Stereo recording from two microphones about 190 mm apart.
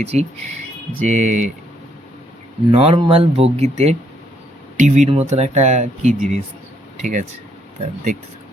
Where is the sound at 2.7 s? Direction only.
30° right (ahead or behind).